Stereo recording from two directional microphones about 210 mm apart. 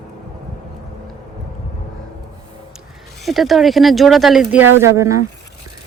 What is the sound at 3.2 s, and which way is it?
Speech, centre (ahead or behind).